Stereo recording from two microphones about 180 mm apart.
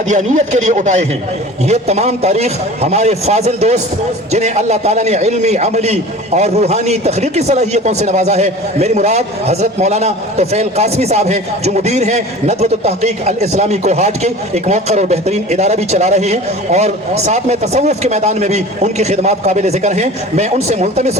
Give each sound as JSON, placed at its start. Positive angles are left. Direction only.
{"t": 0.1, "sound": "a man's voice", "side_deg": -40}